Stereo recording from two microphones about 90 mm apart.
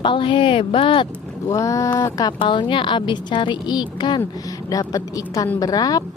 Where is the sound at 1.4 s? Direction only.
35° left (ahead or behind).